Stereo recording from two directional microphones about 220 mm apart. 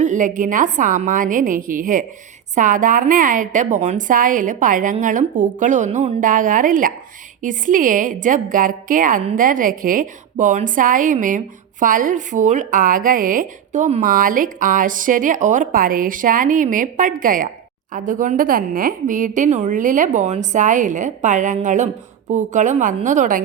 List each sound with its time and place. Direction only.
0.0 s a woman's voice: 35° right (ahead or behind)